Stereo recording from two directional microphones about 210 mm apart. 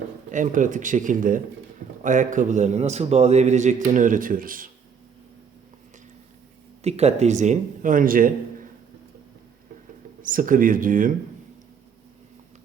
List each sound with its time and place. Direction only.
0.3 s a man's voice: 35° right (ahead or behind)
6.8 s a man's voice: 30° right (ahead or behind)
10.2 s a man's voice: 40° right (ahead or behind)